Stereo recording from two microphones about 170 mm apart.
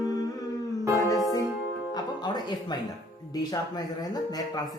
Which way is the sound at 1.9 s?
25° left (ahead or behind).